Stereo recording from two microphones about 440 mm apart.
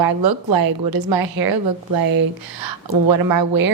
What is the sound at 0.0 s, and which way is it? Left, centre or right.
Speech, right.